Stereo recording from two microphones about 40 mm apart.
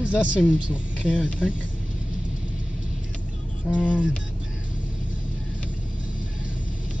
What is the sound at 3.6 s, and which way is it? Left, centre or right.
Speech, left.